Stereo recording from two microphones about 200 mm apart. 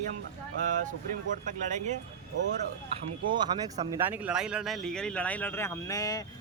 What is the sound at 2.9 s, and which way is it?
Speech, 30° right (ahead or behind).